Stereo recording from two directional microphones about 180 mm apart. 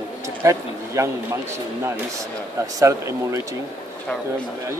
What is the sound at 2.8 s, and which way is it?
Speech, 15° right (ahead or behind).